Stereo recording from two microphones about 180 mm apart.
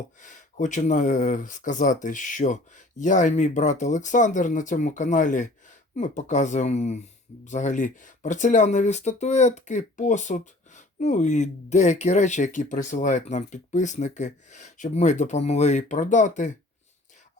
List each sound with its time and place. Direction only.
0.2 s speech: 45° left (ahead or behind)